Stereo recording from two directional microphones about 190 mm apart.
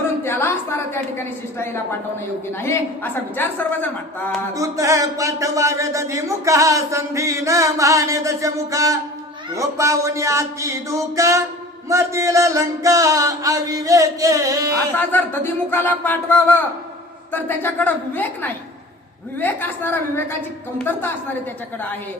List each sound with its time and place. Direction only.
0.3 s a sound: 10° left (ahead or behind)
1.5 s a woman's voice: 10° left (ahead or behind)
4.5 s speech: 15° right (ahead or behind)
14.9 s a woman's voice: 10° left (ahead or behind)